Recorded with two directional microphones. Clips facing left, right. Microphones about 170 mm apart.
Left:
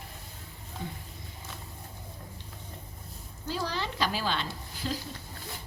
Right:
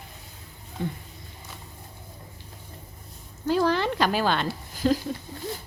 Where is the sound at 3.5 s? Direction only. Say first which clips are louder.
Right 11 dB; 60° right (ahead or behind).